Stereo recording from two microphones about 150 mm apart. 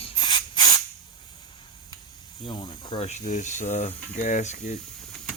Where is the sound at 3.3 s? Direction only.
55° left (ahead or behind).